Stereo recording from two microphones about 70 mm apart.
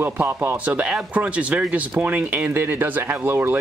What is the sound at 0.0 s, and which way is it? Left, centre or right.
Speech, right.